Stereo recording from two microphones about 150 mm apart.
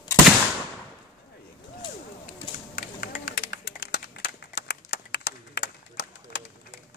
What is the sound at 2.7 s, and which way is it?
Run, 65° left (ahead or behind).